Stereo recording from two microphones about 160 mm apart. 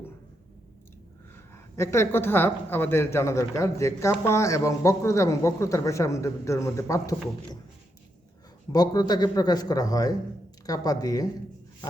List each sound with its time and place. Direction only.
1.4 s a man's voice: 15° left (ahead or behind)
8.7 s a man's voice: 25° left (ahead or behind)